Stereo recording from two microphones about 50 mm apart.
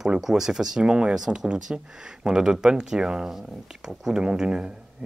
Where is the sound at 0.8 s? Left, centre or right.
Right.